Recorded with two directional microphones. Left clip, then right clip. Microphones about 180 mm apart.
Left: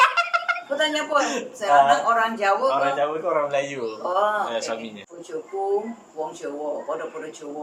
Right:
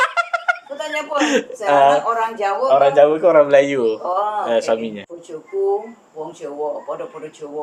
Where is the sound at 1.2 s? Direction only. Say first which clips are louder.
Right 6 dB; 50° right (ahead or behind).